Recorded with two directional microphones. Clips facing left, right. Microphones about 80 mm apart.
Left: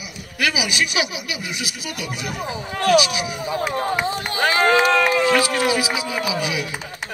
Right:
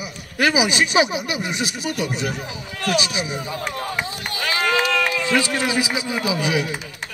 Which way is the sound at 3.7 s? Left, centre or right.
Left.